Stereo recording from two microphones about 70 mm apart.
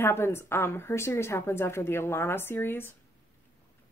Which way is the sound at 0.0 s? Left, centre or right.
Left.